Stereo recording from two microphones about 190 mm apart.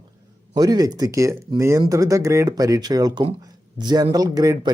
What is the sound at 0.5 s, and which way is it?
Speech, 20° right (ahead or behind).